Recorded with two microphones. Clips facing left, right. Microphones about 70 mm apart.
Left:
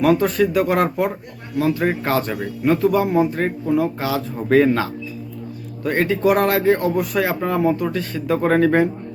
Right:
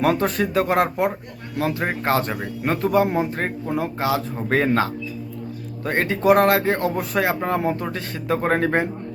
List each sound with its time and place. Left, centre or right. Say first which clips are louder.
0.0 s speech: left 4 dB; right